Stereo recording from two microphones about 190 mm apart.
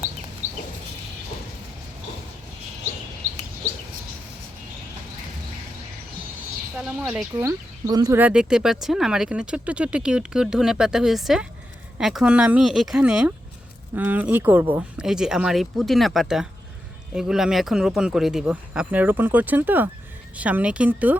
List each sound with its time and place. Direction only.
0.4 s chicken: 40° right (ahead or behind)
6.7 s speech: 10° right (ahead or behind)
8.2 s speech: 5° right (ahead or behind)